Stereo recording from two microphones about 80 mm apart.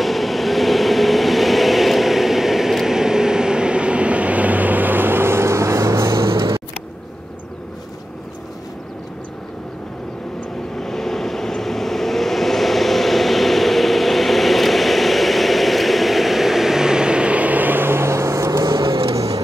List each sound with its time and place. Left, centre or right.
0.0 s vehicle: centre; by 6.6 s right
10.7 s vehicle: centre; by 18.9 s right
19.1 s music: right